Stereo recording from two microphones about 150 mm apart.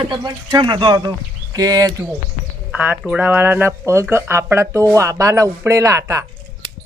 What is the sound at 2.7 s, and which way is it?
Speech, 10° right (ahead or behind).